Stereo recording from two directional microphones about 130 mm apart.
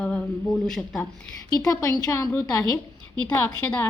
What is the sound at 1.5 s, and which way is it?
A woman's voice, 25° left (ahead or behind).